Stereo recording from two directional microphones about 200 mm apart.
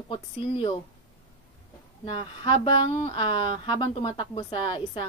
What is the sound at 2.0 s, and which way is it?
Speech, 25° left (ahead or behind).